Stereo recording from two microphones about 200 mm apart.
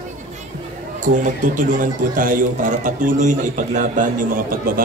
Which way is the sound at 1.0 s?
40° right (ahead or behind).